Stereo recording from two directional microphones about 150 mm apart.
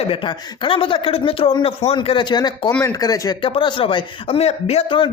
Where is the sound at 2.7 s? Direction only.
10° left (ahead or behind).